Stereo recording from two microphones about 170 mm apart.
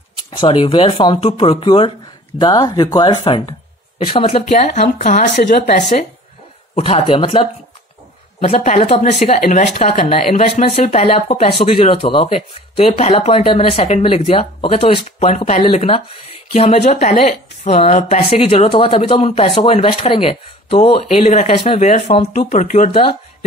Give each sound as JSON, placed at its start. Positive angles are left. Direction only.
{"t": 0.3, "sound": "speech", "side_deg": 30}
{"t": 6.7, "sound": "speech", "side_deg": 35}
{"t": 8.5, "sound": "speech", "side_deg": 40}
{"t": 9.3, "sound": "speech", "side_deg": 55}
{"t": 9.8, "sound": "speech", "side_deg": 35}